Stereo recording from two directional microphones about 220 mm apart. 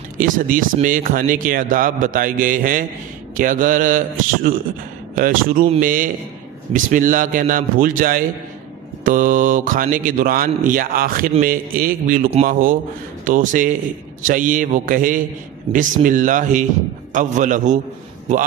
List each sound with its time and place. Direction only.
0.2 s speech: 40° right (ahead or behind)
5.1 s speech: 40° right (ahead or behind)